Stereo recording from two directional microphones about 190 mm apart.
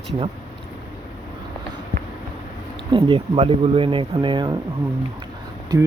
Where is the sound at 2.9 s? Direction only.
30° right (ahead or behind).